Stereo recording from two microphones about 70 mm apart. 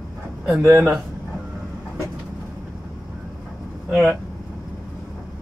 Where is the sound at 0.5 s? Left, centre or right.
Right.